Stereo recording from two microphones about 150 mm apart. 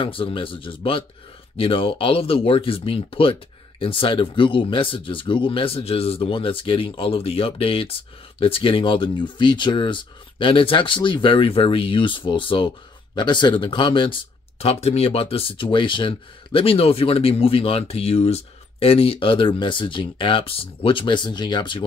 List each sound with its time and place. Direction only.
0.0 s speech: 35° left (ahead or behind)
14.6 s speech: 45° left (ahead or behind)